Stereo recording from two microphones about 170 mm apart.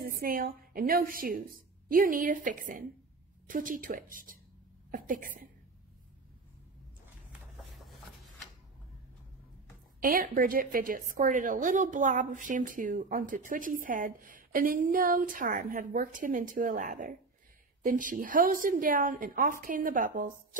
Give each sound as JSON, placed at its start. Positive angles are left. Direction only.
{"t": 0.0, "sound": "a woman's voice", "side_deg": -60}
{"t": 10.0, "sound": "a woman's voice", "side_deg": -60}